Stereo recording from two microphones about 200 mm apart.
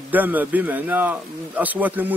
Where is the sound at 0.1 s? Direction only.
10° right (ahead or behind).